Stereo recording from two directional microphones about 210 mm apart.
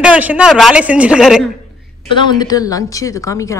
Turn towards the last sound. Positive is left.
turn(degrees=15)  # may be behind; listen again after turning